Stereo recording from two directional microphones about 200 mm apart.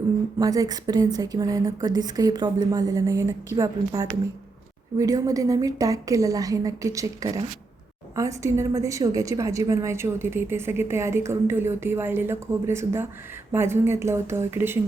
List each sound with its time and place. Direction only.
0.3 s a woman's voice: 15° right (ahead or behind)